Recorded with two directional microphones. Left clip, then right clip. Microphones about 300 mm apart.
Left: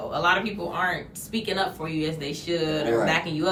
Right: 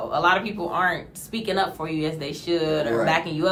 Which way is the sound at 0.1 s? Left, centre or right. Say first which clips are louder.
Right 2 dB; centre.